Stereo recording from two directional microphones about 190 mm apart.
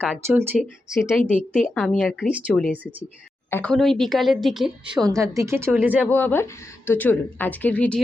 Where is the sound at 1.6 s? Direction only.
5° left (ahead or behind).